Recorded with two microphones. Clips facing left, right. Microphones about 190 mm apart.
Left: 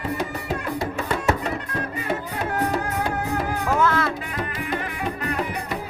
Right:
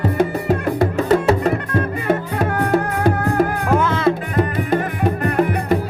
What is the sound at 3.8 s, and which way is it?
Music, 20° right (ahead or behind).